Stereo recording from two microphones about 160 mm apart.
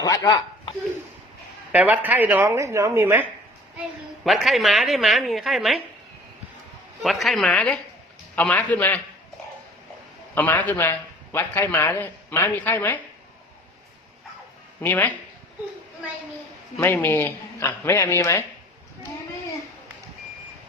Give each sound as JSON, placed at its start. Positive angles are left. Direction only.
{"t": 0.0, "sound": "speech", "side_deg": 25}
{"t": 1.7, "sound": "a woman's voice", "side_deg": -10}
{"t": 4.2, "sound": "a woman's voice", "side_deg": 0}
{"t": 7.0, "sound": "a woman's voice", "side_deg": 0}
{"t": 10.3, "sound": "a man's voice", "side_deg": 10}
{"t": 14.8, "sound": "a man's voice", "side_deg": 10}
{"t": 16.8, "sound": "a man's voice", "side_deg": 15}